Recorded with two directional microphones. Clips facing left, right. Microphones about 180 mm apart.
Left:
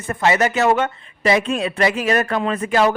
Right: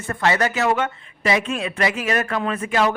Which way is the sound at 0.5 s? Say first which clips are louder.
Left 4 dB; 40° left (ahead or behind).